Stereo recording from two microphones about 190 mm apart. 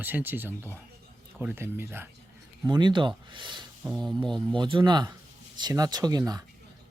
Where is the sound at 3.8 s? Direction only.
Centre (ahead or behind).